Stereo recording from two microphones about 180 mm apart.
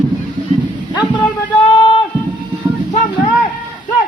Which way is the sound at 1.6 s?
25° left (ahead or behind).